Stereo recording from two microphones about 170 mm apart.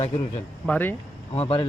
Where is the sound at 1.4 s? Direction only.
30° left (ahead or behind).